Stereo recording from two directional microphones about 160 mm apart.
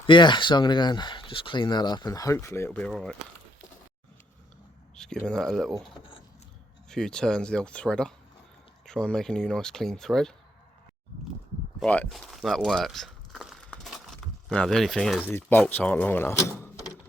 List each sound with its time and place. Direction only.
0.1 s speech: 30° left (ahead or behind); by 3.2 s 5° left (ahead or behind)
4.9 s speech: 5° left (ahead or behind)
6.9 s speech: 5° left (ahead or behind)
11.8 s speech: 5° left (ahead or behind)
13.7 s a sound: centre (ahead or behind)
15.3 s speech: 15° left (ahead or behind)